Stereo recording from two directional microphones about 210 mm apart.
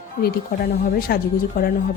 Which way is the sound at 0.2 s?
45° left (ahead or behind).